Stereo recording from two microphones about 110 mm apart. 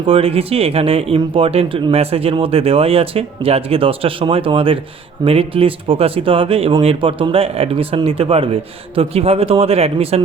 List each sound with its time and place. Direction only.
0.0 s speech: 60° right (ahead or behind)